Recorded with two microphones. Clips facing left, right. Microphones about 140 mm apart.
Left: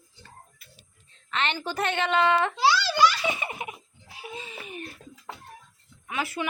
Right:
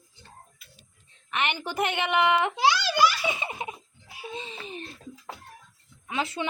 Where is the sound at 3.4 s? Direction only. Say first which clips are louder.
Right 1 dB; 25° right (ahead or behind).